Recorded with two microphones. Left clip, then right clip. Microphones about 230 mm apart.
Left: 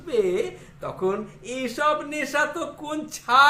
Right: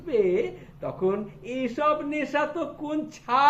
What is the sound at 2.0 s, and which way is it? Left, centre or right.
Speech, centre.